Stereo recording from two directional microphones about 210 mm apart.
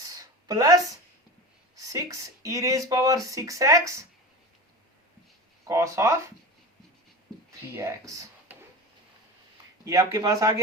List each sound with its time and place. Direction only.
0.0 s a sound: 15° right (ahead or behind)
1.7 s speech: 15° right (ahead or behind)
5.6 s speech: 15° right (ahead or behind)
7.8 s speech: 15° right (ahead or behind)
9.8 s speech: 15° right (ahead or behind)